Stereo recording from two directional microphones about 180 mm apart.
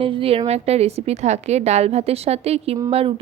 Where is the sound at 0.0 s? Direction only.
30° right (ahead or behind).